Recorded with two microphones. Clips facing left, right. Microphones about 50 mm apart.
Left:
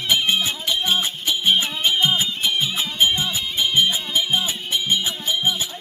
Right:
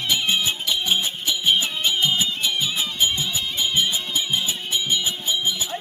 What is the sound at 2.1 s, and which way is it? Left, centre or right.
Music, left.